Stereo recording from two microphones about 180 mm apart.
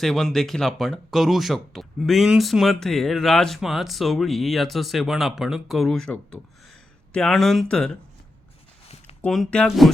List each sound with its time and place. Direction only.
0.0 s speech: centre (ahead or behind)
9.2 s speech: 5° left (ahead or behind)